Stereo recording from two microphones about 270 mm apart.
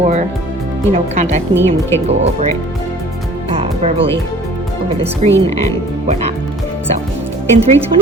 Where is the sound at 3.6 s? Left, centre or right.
Right.